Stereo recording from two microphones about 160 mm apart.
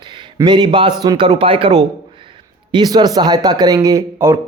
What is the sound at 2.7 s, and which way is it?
Speech, 25° right (ahead or behind).